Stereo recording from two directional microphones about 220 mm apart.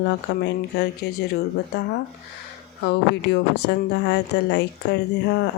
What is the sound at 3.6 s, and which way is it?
Speech, 55° left (ahead or behind).